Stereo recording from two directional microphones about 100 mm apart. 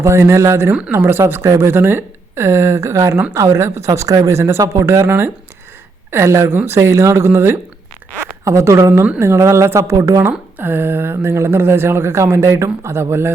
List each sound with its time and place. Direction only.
0.0 s a woman's voice: 30° right (ahead or behind)